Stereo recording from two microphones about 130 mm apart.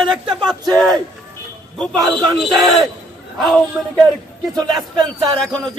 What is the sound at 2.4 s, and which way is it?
Speech, centre (ahead or behind).